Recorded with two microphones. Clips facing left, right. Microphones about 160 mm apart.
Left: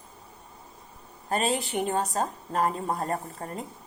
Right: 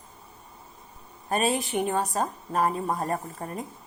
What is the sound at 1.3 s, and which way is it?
Speech, 20° right (ahead or behind).